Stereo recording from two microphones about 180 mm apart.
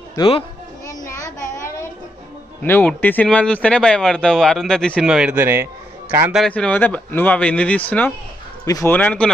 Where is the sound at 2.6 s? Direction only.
10° left (ahead or behind); by 6.3 s 15° right (ahead or behind).